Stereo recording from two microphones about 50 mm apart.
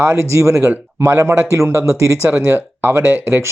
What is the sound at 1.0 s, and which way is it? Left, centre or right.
Speech, right.